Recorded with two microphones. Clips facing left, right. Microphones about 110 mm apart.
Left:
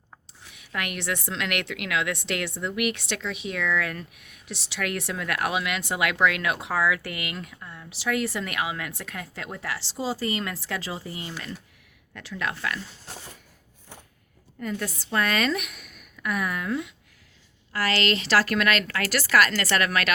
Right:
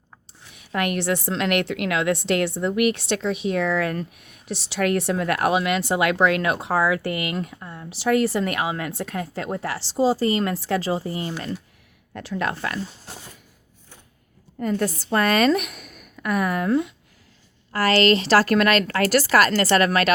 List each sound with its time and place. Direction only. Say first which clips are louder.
0.5 s a woman's voice: right 8 dB; 35° right (ahead or behind)
13.1 s a sound: right 1 dB; 10° right (ahead or behind)
14.6 s a woman's voice: right 8 dB; 40° right (ahead or behind)